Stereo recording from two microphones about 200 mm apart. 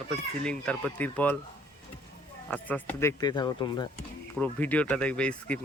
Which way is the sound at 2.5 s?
10° left (ahead or behind).